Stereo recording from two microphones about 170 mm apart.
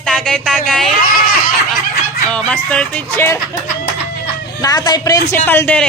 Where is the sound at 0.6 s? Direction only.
5° left (ahead or behind).